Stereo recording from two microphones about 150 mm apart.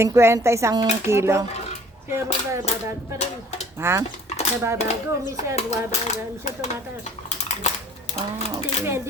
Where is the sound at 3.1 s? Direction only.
45° left (ahead or behind).